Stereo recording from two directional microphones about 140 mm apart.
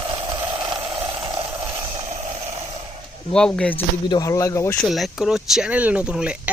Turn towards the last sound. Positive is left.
turn(degrees=-10)  # may be behind; listen again after turning